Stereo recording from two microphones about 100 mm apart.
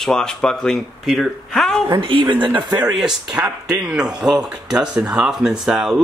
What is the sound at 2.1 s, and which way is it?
Speech, 50° right (ahead or behind).